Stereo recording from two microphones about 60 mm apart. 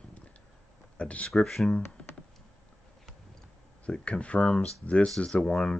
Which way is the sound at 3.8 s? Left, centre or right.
Centre.